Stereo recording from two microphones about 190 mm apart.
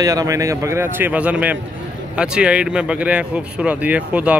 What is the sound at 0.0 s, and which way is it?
Speech, 20° right (ahead or behind).